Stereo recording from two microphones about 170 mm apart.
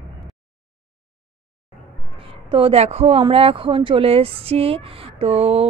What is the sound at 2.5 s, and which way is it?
Speech, 35° right (ahead or behind).